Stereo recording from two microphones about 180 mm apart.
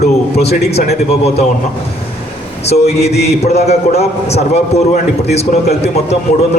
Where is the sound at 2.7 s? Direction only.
35° left (ahead or behind).